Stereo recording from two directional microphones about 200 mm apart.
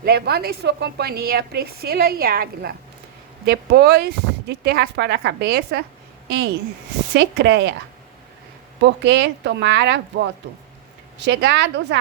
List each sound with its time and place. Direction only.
0.0 s a woman's voice: 50° right (ahead or behind)
8.8 s speech: 60° right (ahead or behind)